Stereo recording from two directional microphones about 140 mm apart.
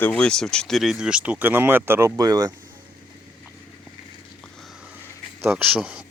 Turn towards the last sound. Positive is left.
turn(degrees=-5)  # may be behind; listen again after turning